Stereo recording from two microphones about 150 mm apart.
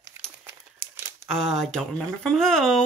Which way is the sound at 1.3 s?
Centre (ahead or behind).